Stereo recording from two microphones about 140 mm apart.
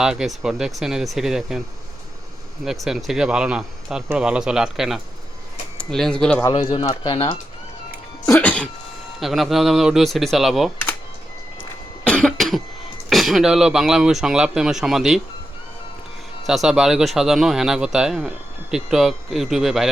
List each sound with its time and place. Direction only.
0.0 s speech: 5° right (ahead or behind)
2.6 s speech: centre (ahead or behind)
6.5 s speech: 40° left (ahead or behind)
8.3 s music: 10° left (ahead or behind)
9.2 s speech: centre (ahead or behind)
12.0 s cough: 5° left (ahead or behind)
13.1 s speech: centre (ahead or behind)
16.5 s speech: 5° right (ahead or behind)